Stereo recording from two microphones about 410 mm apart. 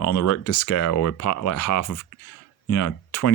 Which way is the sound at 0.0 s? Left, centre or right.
Left.